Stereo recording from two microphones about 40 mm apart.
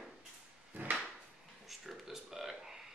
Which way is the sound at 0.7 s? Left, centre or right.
Right.